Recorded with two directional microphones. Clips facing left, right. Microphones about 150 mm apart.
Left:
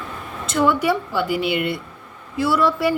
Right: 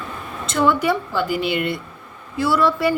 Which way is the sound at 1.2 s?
65° left (ahead or behind).